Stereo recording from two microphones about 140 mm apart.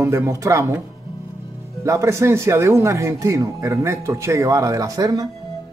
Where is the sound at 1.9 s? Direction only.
20° right (ahead or behind).